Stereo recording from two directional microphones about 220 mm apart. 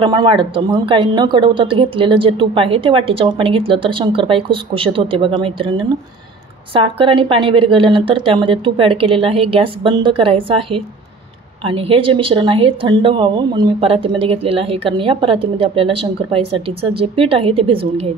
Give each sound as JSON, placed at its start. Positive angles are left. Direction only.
{"t": 0.0, "sound": "a woman's voice", "side_deg": -20}